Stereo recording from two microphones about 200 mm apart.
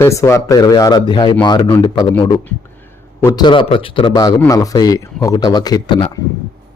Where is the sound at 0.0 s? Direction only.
15° left (ahead or behind).